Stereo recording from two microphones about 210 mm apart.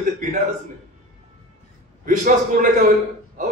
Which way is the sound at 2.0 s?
40° right (ahead or behind).